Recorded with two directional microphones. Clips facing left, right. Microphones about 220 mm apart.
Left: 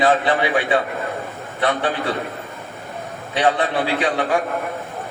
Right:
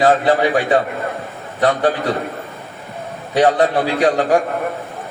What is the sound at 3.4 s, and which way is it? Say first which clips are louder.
A man's voice: right 5 dB; 40° right (ahead or behind).